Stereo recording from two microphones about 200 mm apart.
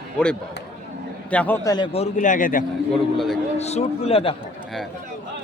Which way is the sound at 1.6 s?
20° left (ahead or behind).